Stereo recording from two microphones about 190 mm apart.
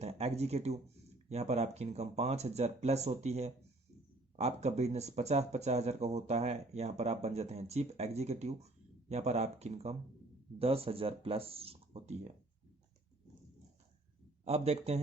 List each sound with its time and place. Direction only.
0.0 s speech: 35° right (ahead or behind)
14.4 s speech: 35° right (ahead or behind)